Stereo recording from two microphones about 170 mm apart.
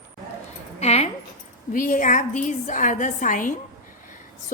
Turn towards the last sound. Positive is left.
turn(degrees=50)  # may be behind; listen again after turning